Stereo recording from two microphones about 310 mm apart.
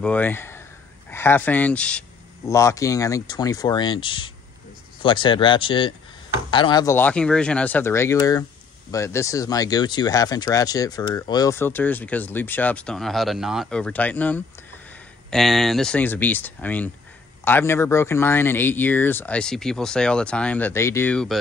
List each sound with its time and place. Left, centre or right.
0.0 s speech: centre